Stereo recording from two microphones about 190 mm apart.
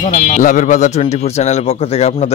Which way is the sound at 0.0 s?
45° left (ahead or behind).